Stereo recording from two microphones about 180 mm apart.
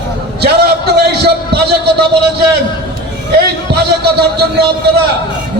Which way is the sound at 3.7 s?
65° right (ahead or behind).